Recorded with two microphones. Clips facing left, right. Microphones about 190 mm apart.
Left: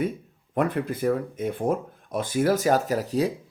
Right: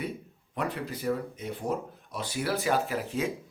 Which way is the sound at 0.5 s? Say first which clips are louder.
Left 8 dB; 50° left (ahead or behind).